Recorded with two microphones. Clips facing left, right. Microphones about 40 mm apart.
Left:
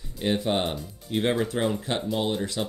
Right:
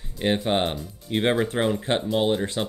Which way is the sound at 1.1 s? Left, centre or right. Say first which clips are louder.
Right 2 dB; right.